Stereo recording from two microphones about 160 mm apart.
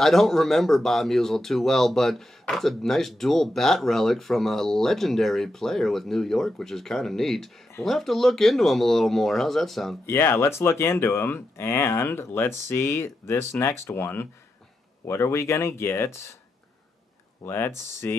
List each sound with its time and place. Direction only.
0.0 s speech: centre (ahead or behind)
10.0 s speech: 15° left (ahead or behind)
17.4 s speech: 15° left (ahead or behind)